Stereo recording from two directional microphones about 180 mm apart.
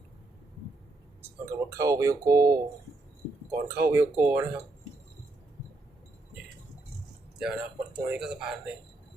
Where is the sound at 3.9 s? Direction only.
10° right (ahead or behind).